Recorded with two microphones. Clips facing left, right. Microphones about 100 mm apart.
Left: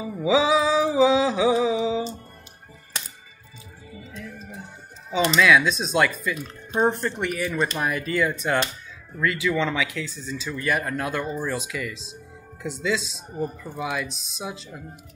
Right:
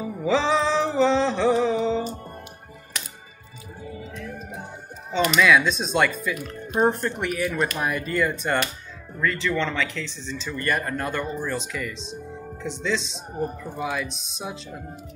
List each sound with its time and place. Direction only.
0.0 s mantra: 5° left (ahead or behind)
4.3 s music: 50° right (ahead or behind)
5.3 s speech: centre (ahead or behind)
6.3 s speech: 25° left (ahead or behind)
6.8 s speech: centre (ahead or behind)